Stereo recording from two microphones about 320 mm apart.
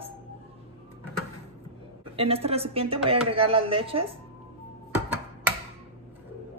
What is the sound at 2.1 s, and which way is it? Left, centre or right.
A man's voice, centre.